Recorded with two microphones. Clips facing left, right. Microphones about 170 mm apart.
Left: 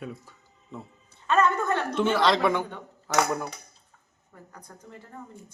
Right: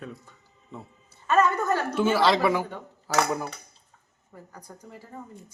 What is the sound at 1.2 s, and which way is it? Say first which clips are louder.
A woman's voice: right 1 dB; 5° right (ahead or behind).